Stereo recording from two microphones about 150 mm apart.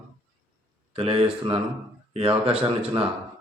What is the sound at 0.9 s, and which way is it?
Speech, 40° right (ahead or behind).